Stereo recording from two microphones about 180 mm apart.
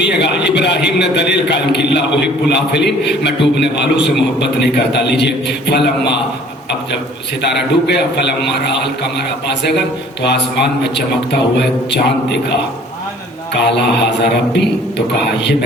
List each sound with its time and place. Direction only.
0.0 s a sound: 70° left (ahead or behind)
0.9 s a man's voice: 70° left (ahead or behind)
7.4 s a man's voice: 70° left (ahead or behind)
10.2 s a man's voice: 70° left (ahead or behind)
13.6 s a man's voice: 70° left (ahead or behind)